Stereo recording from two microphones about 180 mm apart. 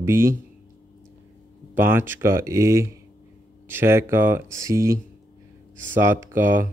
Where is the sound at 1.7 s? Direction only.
10° right (ahead or behind).